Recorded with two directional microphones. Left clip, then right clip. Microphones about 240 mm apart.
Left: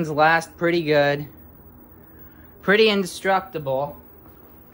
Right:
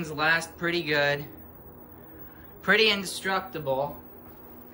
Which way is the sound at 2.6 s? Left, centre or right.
Centre.